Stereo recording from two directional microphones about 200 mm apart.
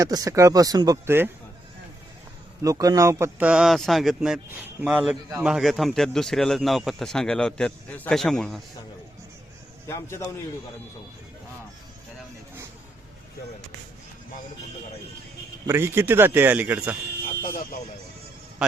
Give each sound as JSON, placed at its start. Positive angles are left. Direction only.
{"t": 0.0, "sound": "a man's voice", "side_deg": -20}
{"t": 2.6, "sound": "speech", "side_deg": -15}
{"t": 9.8, "sound": "a man's voice", "side_deg": 15}
{"t": 15.6, "sound": "a man's voice", "side_deg": -10}
{"t": 17.4, "sound": "a sound", "side_deg": 45}